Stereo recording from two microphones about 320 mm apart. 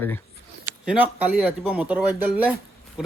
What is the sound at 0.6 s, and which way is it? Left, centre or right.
Speech, centre.